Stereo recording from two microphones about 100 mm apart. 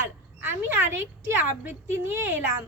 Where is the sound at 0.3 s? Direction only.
20° right (ahead or behind).